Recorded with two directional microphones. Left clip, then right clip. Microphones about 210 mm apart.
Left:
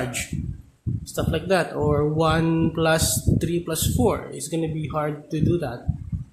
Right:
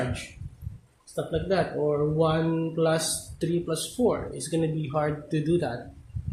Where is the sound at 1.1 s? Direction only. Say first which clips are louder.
Left 4 dB; 25° left (ahead or behind).